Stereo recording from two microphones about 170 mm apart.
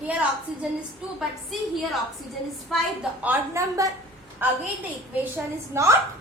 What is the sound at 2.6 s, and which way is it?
A woman's voice, 5° right (ahead or behind).